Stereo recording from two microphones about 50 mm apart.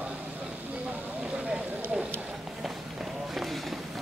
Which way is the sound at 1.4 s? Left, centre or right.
Right.